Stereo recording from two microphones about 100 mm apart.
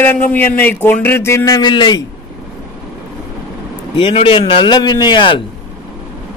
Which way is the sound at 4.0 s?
60° left (ahead or behind).